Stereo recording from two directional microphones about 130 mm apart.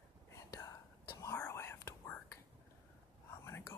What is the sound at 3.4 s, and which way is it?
Whispering, 20° left (ahead or behind).